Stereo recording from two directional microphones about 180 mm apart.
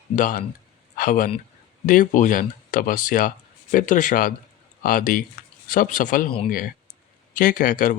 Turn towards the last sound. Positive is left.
turn(degrees=50)  # may be behind; listen again after turning